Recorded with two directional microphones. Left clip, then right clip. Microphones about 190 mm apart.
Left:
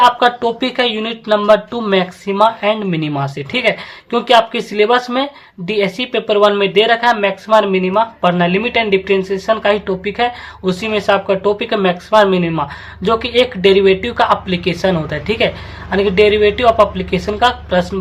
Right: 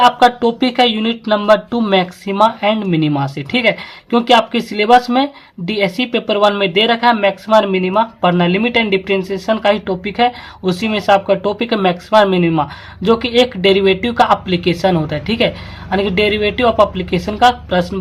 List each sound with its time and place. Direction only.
0.4 s speech: 30° right (ahead or behind)